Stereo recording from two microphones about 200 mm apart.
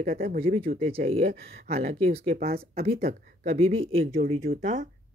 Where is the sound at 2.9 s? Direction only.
50° right (ahead or behind).